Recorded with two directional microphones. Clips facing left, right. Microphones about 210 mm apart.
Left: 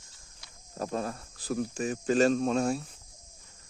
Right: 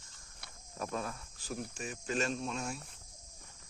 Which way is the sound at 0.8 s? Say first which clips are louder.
Left 6 dB; 35° left (ahead or behind).